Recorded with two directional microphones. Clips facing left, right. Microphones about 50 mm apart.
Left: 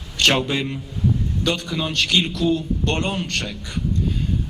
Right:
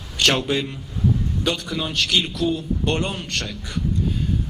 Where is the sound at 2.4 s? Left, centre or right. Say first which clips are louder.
Left 3 dB; centre.